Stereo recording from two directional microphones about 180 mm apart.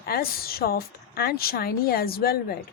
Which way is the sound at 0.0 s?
55° left (ahead or behind).